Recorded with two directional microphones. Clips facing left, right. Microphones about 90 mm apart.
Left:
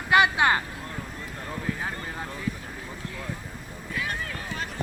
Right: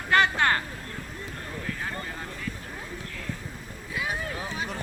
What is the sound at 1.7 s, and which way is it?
Vehicle, 15° left (ahead or behind).